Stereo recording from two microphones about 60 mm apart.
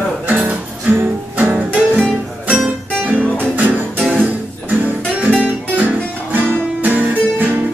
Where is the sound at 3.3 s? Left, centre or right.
Right.